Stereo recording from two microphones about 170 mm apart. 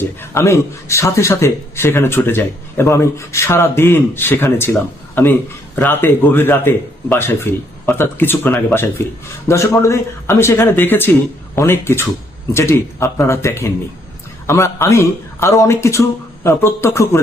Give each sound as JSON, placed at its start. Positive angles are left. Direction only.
{"t": 0.2, "sound": "speech", "side_deg": 15}